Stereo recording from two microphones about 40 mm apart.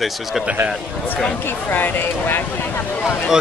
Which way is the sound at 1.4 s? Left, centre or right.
Left.